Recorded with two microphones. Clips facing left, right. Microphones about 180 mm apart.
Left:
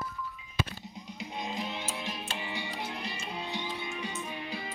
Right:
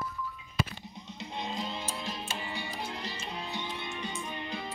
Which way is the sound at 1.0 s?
25° right (ahead or behind).